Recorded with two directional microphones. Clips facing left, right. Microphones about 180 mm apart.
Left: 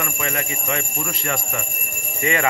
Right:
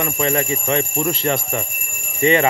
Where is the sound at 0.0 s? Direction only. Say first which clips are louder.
Right 7 dB; 30° right (ahead or behind).